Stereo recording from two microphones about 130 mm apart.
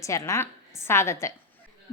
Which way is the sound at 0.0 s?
25° left (ahead or behind).